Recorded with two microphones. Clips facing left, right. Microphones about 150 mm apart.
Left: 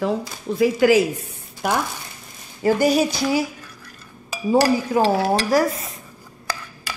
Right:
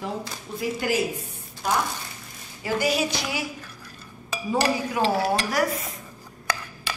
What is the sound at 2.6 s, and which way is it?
Speech, 45° left (ahead or behind).